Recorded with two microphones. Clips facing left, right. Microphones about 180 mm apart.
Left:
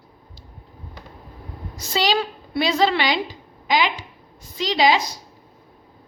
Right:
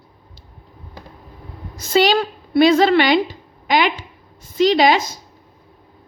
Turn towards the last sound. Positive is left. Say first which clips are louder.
# right 5 dB
turn(degrees=-55)  # may be behind; listen again after turning